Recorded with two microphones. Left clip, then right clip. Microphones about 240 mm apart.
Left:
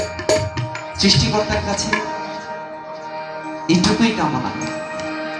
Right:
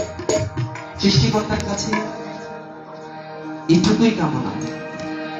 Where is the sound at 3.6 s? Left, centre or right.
Left.